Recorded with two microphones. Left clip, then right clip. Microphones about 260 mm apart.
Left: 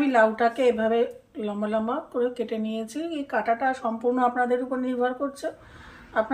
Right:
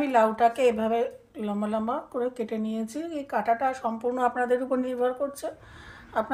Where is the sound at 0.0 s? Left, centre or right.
Right.